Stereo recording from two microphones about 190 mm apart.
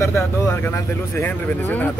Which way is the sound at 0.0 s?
15° left (ahead or behind).